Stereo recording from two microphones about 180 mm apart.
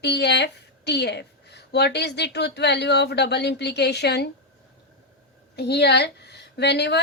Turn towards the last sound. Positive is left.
turn(degrees=70)  # may be behind; listen again after turning